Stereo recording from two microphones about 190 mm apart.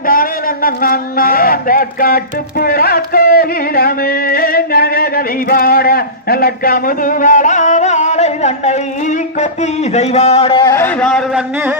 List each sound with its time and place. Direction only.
0.0 s speech: 45° left (ahead or behind); by 10.6 s 30° left (ahead or behind)
10.7 s a man's voice: 10° left (ahead or behind)